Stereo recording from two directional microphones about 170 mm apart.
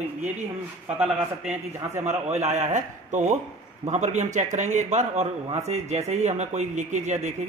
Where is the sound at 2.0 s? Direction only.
40° right (ahead or behind).